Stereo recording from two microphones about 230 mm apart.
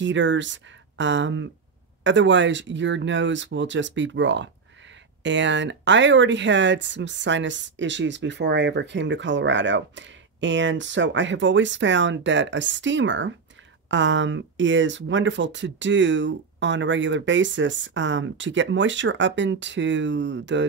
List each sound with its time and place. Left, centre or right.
0.0 s speech: right